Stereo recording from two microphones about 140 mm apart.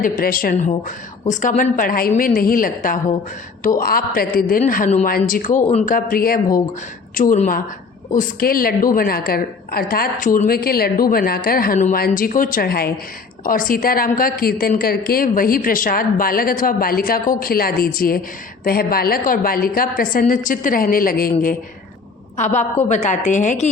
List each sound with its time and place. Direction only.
0.0 s a woman's voice: 90° left
1.3 s a woman's voice: 70° left (ahead or behind)
1.7 s a woman's voice: 85° left
4.6 s a woman's voice: 75° left (ahead or behind); by 5.9 s 60° left (ahead or behind)
5.9 s a woman's voice: 90° left
7.3 s a woman's voice: 65° left (ahead or behind)
8.1 s a woman's voice: 80° left
22.4 s a woman's voice: 55° left (ahead or behind)